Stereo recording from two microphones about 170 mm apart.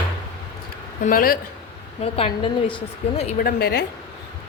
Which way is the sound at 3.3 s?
65° left (ahead or behind).